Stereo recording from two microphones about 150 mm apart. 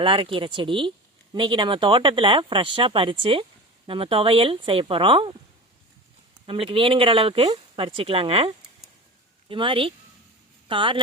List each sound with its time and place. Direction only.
0.0 s speech: 35° right (ahead or behind)
6.4 s speech: 35° right (ahead or behind)